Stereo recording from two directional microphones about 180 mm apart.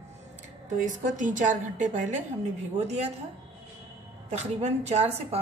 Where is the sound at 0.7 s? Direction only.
45° right (ahead or behind).